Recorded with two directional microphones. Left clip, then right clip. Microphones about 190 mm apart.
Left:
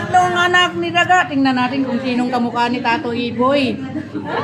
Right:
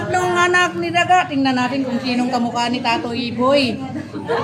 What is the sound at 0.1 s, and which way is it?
A man's voice, 20° right (ahead or behind).